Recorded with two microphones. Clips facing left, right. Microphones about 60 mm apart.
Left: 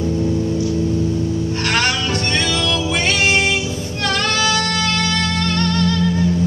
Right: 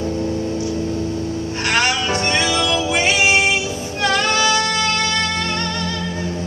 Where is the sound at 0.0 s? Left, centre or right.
Centre.